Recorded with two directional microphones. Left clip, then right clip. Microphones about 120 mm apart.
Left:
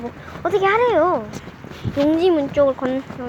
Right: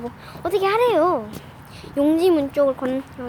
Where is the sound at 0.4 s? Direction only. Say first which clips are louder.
Left 3 dB; centre (ahead or behind).